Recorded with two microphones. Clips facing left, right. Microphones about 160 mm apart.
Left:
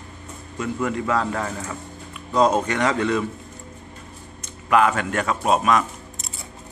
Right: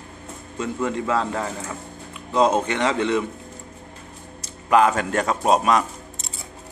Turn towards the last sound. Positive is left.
turn(degrees=-30)  # may be behind; listen again after turning